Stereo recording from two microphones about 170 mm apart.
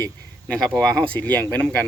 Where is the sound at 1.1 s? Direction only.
10° left (ahead or behind).